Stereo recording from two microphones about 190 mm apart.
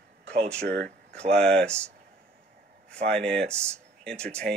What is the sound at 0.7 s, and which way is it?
Speech, 60° right (ahead or behind).